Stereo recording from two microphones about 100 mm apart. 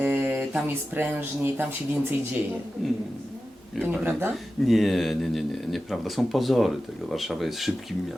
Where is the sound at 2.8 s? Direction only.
Centre (ahead or behind).